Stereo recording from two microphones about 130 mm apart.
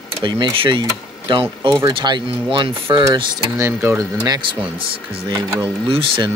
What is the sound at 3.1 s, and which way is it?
Speech, 25° right (ahead or behind).